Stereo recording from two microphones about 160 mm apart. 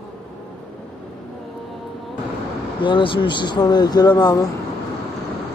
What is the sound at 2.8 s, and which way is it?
Speech, 30° left (ahead or behind).